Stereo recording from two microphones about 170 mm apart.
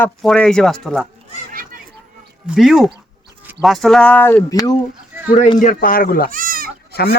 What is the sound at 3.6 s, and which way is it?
Speech, centre (ahead or behind).